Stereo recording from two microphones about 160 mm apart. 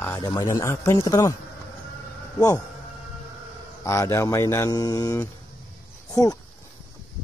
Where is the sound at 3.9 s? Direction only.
15° left (ahead or behind).